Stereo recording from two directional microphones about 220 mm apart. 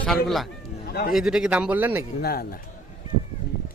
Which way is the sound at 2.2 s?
45° left (ahead or behind).